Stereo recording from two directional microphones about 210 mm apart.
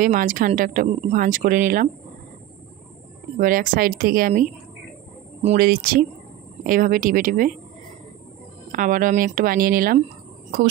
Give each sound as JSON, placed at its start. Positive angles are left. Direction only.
{"t": 0.0, "sound": "speech", "side_deg": -40}
{"t": 3.3, "sound": "speech", "side_deg": -40}
{"t": 5.6, "sound": "speech", "side_deg": -45}
{"t": 8.7, "sound": "speech", "side_deg": -40}